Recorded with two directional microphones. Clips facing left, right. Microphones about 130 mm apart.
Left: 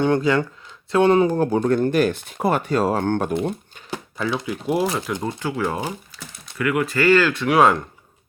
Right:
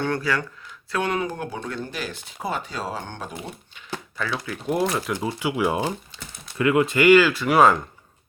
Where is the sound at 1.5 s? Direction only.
45° left (ahead or behind).